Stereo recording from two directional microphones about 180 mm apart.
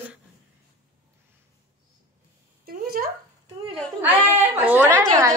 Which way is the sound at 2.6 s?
55° right (ahead or behind).